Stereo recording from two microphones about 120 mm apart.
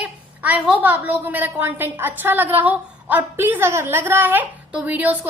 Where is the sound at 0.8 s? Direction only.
15° right (ahead or behind).